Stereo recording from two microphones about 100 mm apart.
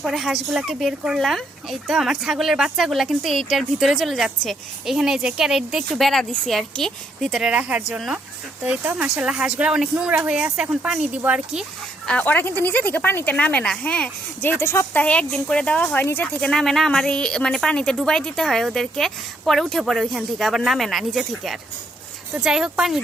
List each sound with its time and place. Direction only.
0.0 s speech: 5° right (ahead or behind)
12.0 s speech: 15° left (ahead or behind)
15.0 s speech: 10° left (ahead or behind); by 23.0 s 5° right (ahead or behind)